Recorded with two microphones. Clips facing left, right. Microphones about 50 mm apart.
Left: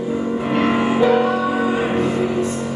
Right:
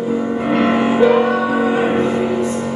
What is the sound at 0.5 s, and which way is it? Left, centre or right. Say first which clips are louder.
Music: right 3 dB; centre.